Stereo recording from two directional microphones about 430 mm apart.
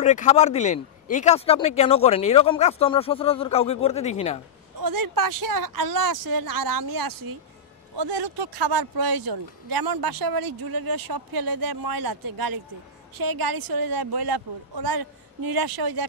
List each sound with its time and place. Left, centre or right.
0.0 s speech: centre
4.7 s speech: right